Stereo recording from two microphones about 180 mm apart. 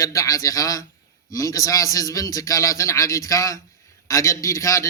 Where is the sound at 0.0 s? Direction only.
15° left (ahead or behind).